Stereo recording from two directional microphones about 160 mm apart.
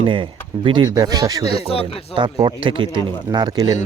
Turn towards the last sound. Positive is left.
turn(degrees=-25)  # may be behind; listen again after turning